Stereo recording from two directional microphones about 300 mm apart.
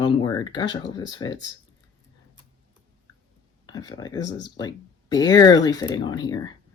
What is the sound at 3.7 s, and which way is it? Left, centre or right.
Speech, centre.